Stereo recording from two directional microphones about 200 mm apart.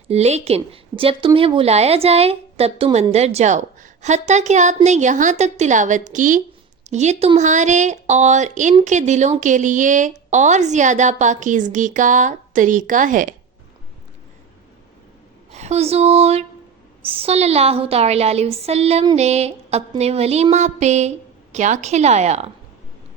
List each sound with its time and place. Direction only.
0.1 s a woman's voice: 35° right (ahead or behind)
15.5 s a woman's voice: 35° right (ahead or behind)